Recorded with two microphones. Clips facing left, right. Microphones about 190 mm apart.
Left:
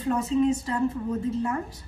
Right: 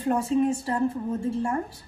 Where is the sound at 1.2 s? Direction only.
30° right (ahead or behind).